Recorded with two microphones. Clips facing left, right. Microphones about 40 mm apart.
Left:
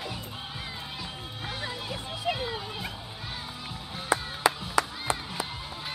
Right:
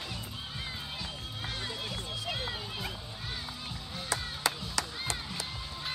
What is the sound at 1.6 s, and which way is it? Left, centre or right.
Run, centre.